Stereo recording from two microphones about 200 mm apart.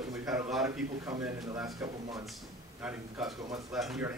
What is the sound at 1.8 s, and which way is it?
Speech, 15° right (ahead or behind).